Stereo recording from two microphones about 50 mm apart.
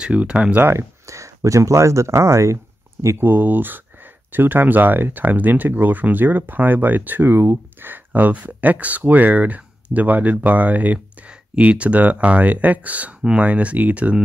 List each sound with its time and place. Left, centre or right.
0.0 s speech: right
0.7 s speech: right
3.2 s speech: right